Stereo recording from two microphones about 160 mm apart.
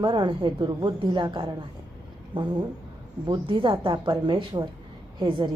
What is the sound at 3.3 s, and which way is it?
A woman's voice, 30° right (ahead or behind).